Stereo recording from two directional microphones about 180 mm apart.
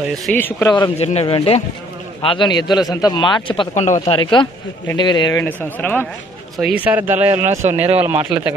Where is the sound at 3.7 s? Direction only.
40° left (ahead or behind).